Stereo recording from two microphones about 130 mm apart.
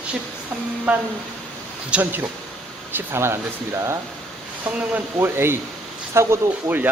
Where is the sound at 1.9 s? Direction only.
15° right (ahead or behind).